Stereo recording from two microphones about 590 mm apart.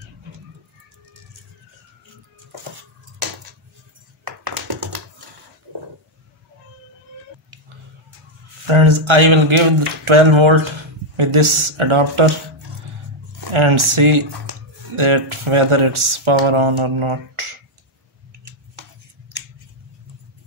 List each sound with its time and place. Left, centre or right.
8.6 s speech: right
13.5 s speech: right